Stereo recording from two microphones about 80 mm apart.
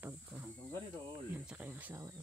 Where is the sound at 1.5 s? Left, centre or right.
Centre.